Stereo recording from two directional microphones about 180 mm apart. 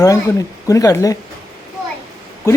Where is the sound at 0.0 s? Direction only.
20° left (ahead or behind).